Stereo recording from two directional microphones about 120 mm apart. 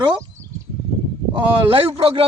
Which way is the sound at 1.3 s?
50° right (ahead or behind).